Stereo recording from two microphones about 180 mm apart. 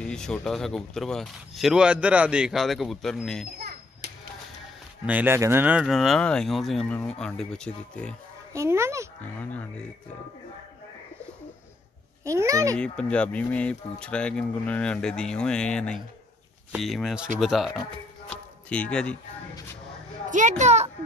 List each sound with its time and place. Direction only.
0.0 s speech: 5° left (ahead or behind)
5.0 s speech: 10° right (ahead or behind)
8.5 s speech: 15° right (ahead or behind)
9.4 s speech: 10° left (ahead or behind)
12.3 s speech: 15° right (ahead or behind)
12.7 s speech: 5° left (ahead or behind)
20.2 s a child's voice: 45° right (ahead or behind)